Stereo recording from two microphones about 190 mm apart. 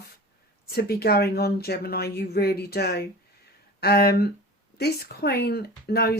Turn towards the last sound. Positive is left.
turn(degrees=55)  # may be behind; listen again after turning